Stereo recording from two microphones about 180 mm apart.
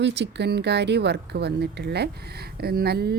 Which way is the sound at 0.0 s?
70° right (ahead or behind).